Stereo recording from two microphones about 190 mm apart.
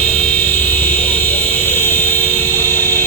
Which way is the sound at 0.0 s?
5° left (ahead or behind).